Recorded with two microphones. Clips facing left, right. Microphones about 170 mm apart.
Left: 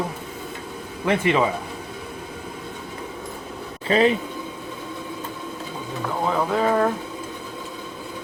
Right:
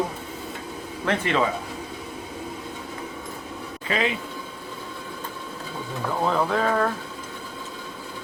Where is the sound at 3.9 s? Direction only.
35° left (ahead or behind).